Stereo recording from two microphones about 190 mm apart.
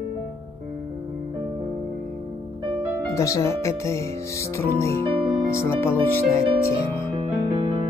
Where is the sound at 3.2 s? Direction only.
15° left (ahead or behind).